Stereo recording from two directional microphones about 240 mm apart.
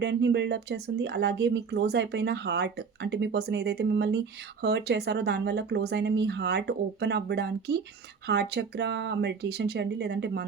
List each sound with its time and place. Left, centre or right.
0.0 s speech: right